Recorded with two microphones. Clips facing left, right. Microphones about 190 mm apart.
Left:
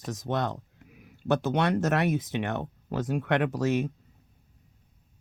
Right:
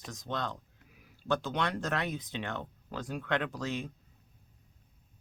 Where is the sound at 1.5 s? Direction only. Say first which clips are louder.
Left 8 dB; 45° left (ahead or behind).